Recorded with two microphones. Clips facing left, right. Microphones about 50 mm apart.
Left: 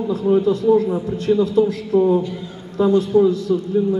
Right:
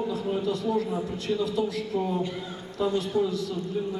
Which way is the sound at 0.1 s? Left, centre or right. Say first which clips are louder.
Left 11 dB; left.